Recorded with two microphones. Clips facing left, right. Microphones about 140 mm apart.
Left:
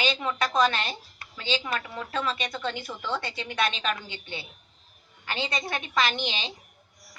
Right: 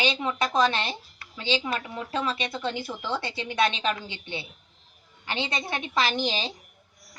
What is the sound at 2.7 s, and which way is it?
A woman's voice, 30° right (ahead or behind).